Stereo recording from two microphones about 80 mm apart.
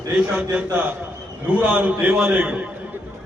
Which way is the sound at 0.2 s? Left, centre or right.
Centre.